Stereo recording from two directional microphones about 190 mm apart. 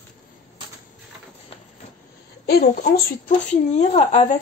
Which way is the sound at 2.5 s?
55° left (ahead or behind).